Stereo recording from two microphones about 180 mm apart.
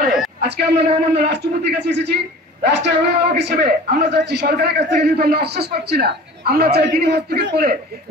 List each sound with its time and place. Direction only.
0.4 s a man's voice: 65° right (ahead or behind)